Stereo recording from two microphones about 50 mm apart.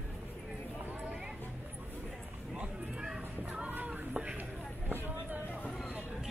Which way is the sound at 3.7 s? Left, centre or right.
Right.